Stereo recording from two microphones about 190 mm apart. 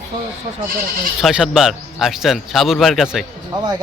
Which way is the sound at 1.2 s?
Centre (ahead or behind).